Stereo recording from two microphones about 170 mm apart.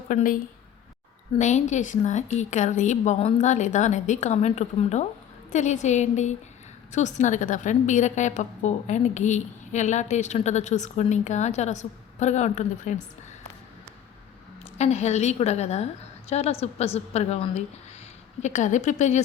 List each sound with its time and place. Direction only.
0.1 s a woman's voice: 50° left (ahead or behind)
1.4 s a woman's voice: 45° left (ahead or behind)
14.8 s a woman's voice: 40° left (ahead or behind)